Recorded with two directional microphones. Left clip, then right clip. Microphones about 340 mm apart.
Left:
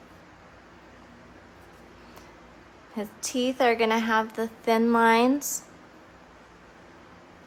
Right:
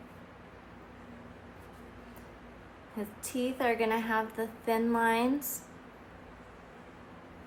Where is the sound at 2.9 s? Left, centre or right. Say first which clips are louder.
Left 7 dB; left.